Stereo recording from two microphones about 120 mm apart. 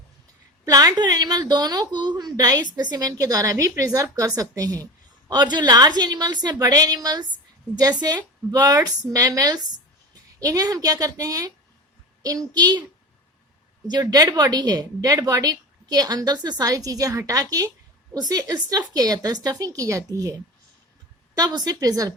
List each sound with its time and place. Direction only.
0.6 s a woman's voice: 30° right (ahead or behind)
13.9 s a woman's voice: 30° right (ahead or behind)